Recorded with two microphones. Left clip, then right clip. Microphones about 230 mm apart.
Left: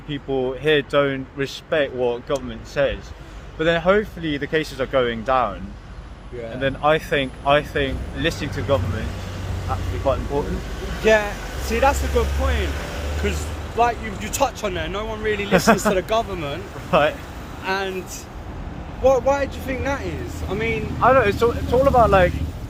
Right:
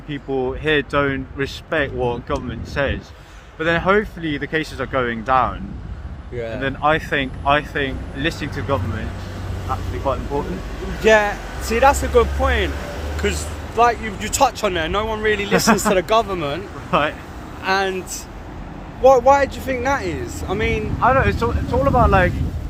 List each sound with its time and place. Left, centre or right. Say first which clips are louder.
0.1 s speech: right 1 dB; centre
6.6 s speech: even; centre
11.0 s speech: right 3 dB; right
16.9 s speech: left 1 dB; left
17.6 s speech: right 5 dB; right
21.0 s speech: left 1 dB; left